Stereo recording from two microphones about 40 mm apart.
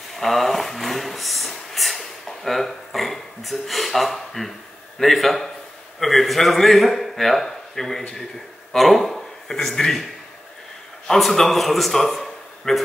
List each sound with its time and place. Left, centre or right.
0.1 s a sound: centre
4.9 s a man's voice: centre
11.1 s a man's voice: centre